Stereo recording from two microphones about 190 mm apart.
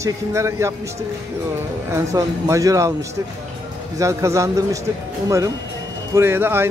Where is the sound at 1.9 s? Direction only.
15° right (ahead or behind).